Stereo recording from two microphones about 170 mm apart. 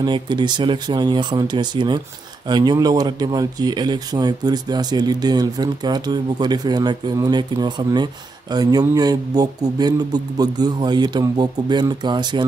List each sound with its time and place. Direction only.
0.0 s speech: 25° right (ahead or behind)